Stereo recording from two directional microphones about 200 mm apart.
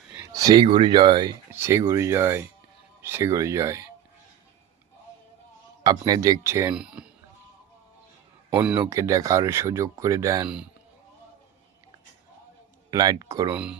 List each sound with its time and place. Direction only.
0.2 s speech: 20° right (ahead or behind)
1.5 s speech: 10° right (ahead or behind)
5.8 s speech: 20° right (ahead or behind); by 7.1 s 5° right (ahead or behind)
8.4 s speech: 10° right (ahead or behind)
10.4 s a man's voice: 5° right (ahead or behind)
12.9 s speech: 20° right (ahead or behind)